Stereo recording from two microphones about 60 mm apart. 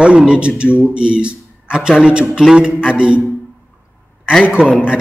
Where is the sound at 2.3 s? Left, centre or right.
Centre.